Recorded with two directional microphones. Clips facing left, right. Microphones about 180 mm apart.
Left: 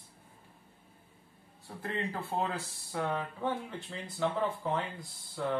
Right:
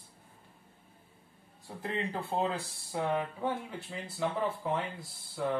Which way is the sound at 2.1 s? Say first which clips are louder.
Right 3 dB; 25° right (ahead or behind).